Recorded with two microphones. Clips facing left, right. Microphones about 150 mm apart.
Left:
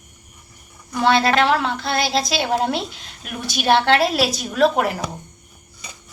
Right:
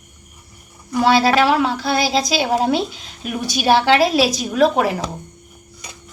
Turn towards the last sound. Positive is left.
turn(degrees=0)  # may be behind; listen again after turning